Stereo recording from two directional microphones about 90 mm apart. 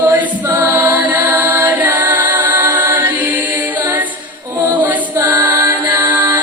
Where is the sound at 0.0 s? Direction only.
20° right (ahead or behind).